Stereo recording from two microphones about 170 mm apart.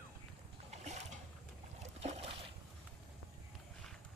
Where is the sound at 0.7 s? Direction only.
40° right (ahead or behind).